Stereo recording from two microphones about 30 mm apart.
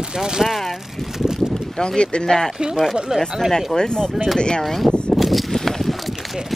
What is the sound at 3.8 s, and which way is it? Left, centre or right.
Speech, left.